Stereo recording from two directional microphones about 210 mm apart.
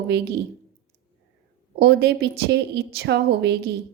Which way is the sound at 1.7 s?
50° right (ahead or behind).